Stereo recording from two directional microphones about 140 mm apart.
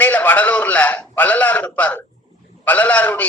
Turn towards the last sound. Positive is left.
turn(degrees=10)  # may be behind; listen again after turning